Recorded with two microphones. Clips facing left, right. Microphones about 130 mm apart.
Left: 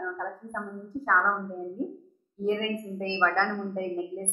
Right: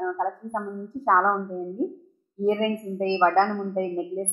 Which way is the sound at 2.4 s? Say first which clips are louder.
Right 5 dB; 35° right (ahead or behind).